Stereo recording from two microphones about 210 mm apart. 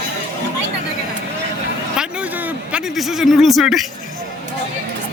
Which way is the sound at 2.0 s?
5° right (ahead or behind).